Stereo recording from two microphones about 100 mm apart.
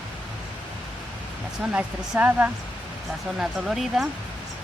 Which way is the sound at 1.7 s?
15° right (ahead or behind).